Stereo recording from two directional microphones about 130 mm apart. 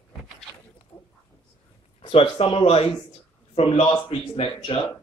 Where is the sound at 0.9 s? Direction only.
15° left (ahead or behind).